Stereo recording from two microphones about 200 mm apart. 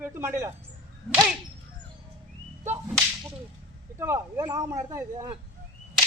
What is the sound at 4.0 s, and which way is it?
Speech, 15° right (ahead or behind).